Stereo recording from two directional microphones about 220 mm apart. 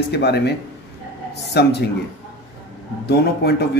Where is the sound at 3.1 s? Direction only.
50° left (ahead or behind).